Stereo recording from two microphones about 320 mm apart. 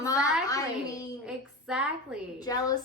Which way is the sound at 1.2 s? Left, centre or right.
Centre.